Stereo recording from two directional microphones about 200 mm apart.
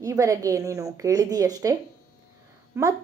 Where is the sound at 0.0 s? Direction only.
15° right (ahead or behind).